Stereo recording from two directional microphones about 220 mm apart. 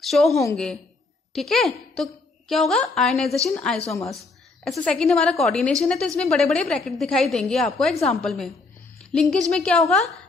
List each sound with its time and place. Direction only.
0.0 s a woman's voice: centre (ahead or behind)
3.8 s a woman's voice: 15° left (ahead or behind)
4.1 s a sound: centre (ahead or behind)
4.9 s a woman's voice: 5° left (ahead or behind)